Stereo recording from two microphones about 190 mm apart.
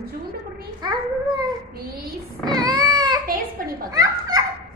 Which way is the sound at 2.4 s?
20° right (ahead or behind).